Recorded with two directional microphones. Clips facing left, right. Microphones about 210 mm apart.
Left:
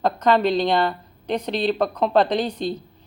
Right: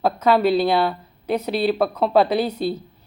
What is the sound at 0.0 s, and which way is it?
Speech, 5° right (ahead or behind).